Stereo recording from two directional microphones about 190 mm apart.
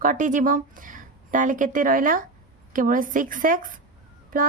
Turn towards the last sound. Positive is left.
turn(degrees=-45)  # may be behind; listen again after turning